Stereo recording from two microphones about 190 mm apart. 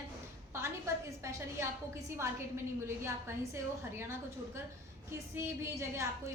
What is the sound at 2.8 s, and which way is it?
A woman's voice, 15° right (ahead or behind).